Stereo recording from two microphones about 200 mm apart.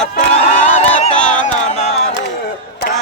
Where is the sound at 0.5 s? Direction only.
40° left (ahead or behind).